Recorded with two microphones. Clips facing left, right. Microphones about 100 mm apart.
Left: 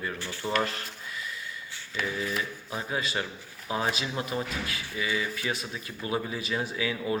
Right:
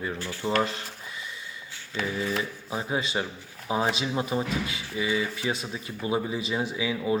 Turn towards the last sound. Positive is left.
turn(degrees=-15)  # may be behind; listen again after turning